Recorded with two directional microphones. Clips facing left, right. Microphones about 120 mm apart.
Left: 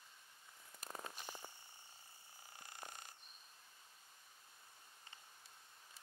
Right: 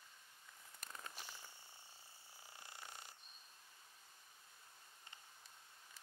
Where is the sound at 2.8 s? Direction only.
45° left (ahead or behind).